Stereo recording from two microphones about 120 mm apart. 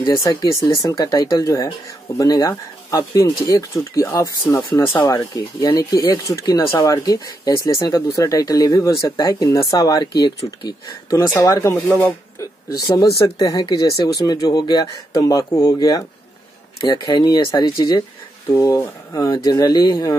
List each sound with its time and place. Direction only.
0.1 s speech: 30° left (ahead or behind)
11.7 s speech: 15° left (ahead or behind)
13.5 s speech: 35° left (ahead or behind)